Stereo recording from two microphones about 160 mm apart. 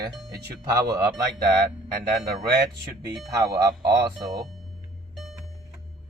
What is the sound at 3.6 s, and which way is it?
Speech, 20° right (ahead or behind).